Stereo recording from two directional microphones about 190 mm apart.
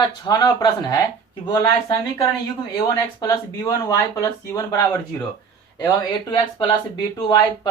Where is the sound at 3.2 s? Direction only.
15° left (ahead or behind).